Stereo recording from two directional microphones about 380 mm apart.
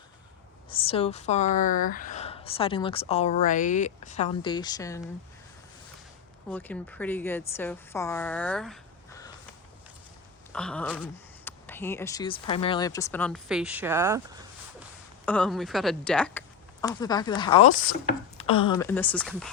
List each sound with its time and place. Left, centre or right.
0.7 s speech: centre
6.5 s speech: centre
10.5 s speech: centre
15.3 s speech: centre